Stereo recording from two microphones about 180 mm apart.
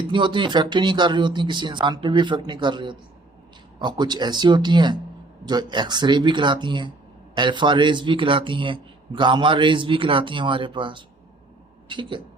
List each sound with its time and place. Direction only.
0.1 s speech: 25° right (ahead or behind)